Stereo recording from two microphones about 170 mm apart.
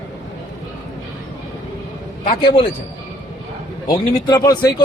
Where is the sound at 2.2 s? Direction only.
30° left (ahead or behind).